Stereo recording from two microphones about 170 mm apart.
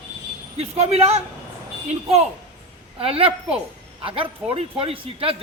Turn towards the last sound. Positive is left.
turn(degrees=-35)  # may be behind; listen again after turning